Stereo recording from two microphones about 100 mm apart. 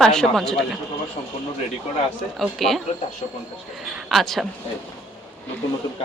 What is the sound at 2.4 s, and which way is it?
Speech, centre (ahead or behind).